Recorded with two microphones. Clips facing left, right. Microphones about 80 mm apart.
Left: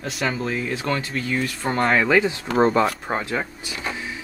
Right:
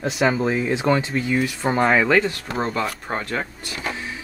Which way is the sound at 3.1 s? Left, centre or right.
Centre.